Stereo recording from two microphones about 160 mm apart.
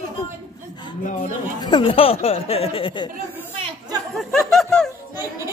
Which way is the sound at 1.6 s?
25° left (ahead or behind).